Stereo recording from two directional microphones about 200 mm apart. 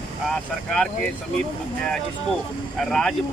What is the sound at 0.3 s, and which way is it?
Speech, centre (ahead or behind).